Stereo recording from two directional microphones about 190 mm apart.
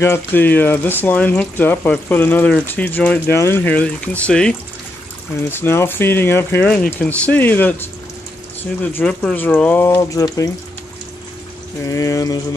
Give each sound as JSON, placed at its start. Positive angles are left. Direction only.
{"t": 0.0, "sound": "speech", "side_deg": 10}
{"t": 8.9, "sound": "speech", "side_deg": 5}
{"t": 11.8, "sound": "speech", "side_deg": 15}